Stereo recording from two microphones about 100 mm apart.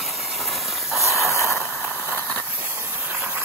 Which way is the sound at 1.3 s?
30° left (ahead or behind).